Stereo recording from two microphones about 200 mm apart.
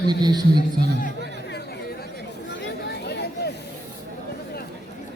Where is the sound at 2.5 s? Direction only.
55° left (ahead or behind).